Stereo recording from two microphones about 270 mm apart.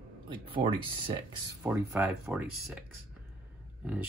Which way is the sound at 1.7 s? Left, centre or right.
Centre.